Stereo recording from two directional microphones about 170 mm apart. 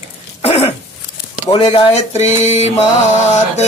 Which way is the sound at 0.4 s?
35° left (ahead or behind).